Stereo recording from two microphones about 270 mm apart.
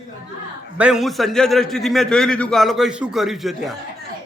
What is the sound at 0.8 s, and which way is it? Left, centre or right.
A man's voice, centre.